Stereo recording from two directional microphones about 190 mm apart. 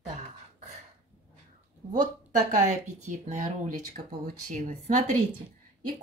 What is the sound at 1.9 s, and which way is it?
Speech, 40° right (ahead or behind).